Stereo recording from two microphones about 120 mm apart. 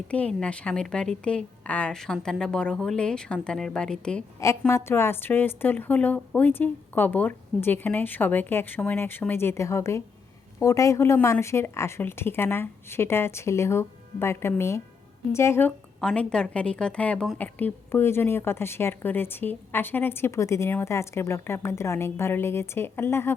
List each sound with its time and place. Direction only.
0.1 s a woman's voice: 10° left (ahead or behind)
4.7 s a woman's voice: 20° left (ahead or behind)
16.0 s a woman's voice: 5° left (ahead or behind)